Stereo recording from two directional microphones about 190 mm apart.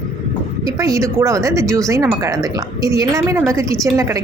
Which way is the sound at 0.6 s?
15° right (ahead or behind).